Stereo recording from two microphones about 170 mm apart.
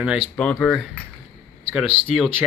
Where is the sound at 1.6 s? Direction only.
10° right (ahead or behind).